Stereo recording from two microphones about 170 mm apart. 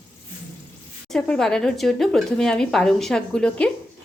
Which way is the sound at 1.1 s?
5° left (ahead or behind).